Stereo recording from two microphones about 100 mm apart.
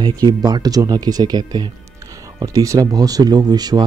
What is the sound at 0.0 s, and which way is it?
Speech, 40° right (ahead or behind).